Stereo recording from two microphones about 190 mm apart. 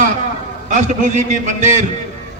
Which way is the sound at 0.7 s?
40° right (ahead or behind).